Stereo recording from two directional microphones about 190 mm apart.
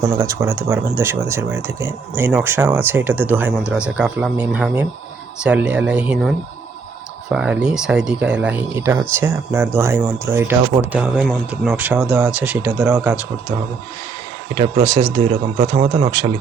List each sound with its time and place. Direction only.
0.2 s speech: 15° right (ahead or behind)
14.5 s speech: 25° right (ahead or behind)